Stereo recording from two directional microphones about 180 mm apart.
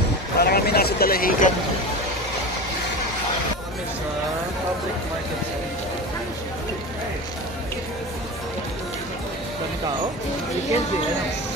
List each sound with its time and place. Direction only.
0.4 s speech: 60° left (ahead or behind)